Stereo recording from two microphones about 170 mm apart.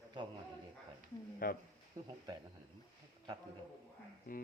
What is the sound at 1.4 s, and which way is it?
Speech, 60° left (ahead or behind).